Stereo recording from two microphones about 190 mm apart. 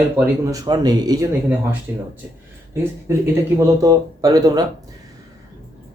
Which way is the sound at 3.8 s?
20° right (ahead or behind).